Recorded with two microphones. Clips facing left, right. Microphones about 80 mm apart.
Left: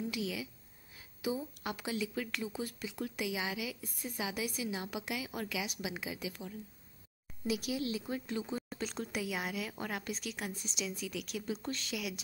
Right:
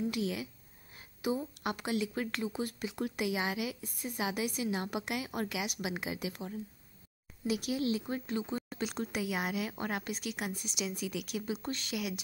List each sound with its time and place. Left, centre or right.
0.1 s a woman's voice: right
1.6 s a woman's voice: right
8.0 s speech: centre
9.3 s a woman's voice: right
10.0 s speech: centre